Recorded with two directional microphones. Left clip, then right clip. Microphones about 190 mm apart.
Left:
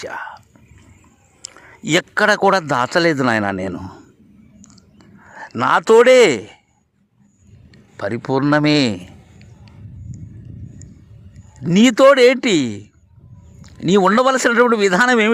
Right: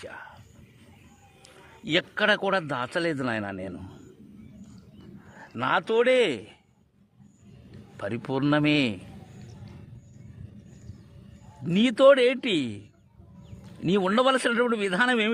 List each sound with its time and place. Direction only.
0.0 s speech: 35° left (ahead or behind)
1.4 s a sound: 35° left (ahead or behind)
1.9 s a man's voice: 30° left (ahead or behind)
5.3 s speech: 35° left (ahead or behind)
7.9 s a man's voice: 20° left (ahead or behind)
11.6 s a man's voice: 30° left (ahead or behind)